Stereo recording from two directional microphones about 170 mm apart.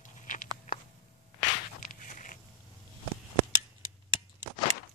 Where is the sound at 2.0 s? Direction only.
50° left (ahead or behind).